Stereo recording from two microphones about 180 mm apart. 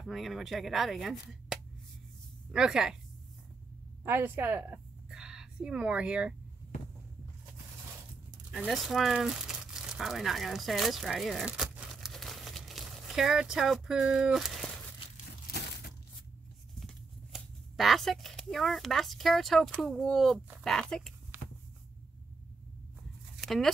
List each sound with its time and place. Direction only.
0.0 s speech: centre (ahead or behind)
4.0 s a woman's voice: 10° right (ahead or behind)
8.5 s speech: centre (ahead or behind)
16.8 s speech: centre (ahead or behind)
21.3 s a sound: 10° right (ahead or behind)
23.3 s a sound: centre (ahead or behind)